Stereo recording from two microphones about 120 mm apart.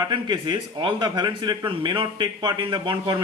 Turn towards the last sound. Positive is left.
turn(degrees=-35)  # may be behind; listen again after turning